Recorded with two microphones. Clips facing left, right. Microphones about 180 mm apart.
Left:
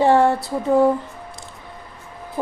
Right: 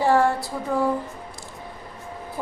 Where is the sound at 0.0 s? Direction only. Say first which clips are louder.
Left 4 dB; 25° left (ahead or behind).